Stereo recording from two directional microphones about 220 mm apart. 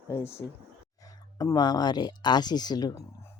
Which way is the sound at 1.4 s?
20° left (ahead or behind).